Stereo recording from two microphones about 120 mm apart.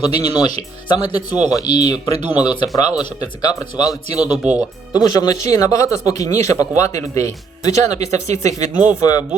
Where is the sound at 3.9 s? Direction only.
10° right (ahead or behind).